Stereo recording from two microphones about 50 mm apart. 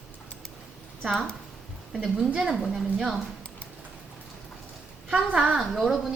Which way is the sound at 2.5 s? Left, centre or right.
Centre.